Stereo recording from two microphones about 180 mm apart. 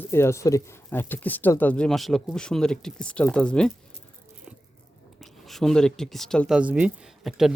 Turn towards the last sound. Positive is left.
turn(degrees=0)  # may be behind; listen again after turning